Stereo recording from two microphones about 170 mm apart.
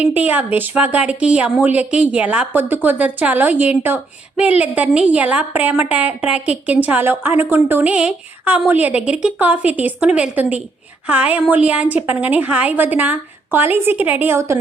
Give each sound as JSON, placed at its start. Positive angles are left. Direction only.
{"t": 0.0, "sound": "speech", "side_deg": -10}